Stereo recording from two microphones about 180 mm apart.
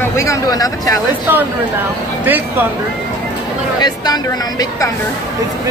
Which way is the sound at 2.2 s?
10° right (ahead or behind).